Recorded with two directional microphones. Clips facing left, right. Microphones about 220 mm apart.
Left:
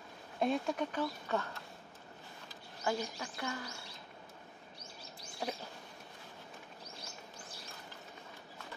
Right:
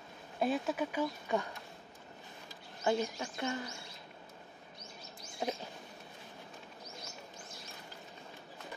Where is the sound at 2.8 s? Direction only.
25° right (ahead or behind).